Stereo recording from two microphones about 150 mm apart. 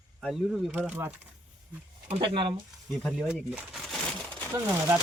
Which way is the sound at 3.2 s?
5° right (ahead or behind).